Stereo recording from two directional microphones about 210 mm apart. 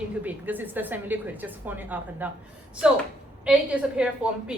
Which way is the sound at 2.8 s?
5° right (ahead or behind).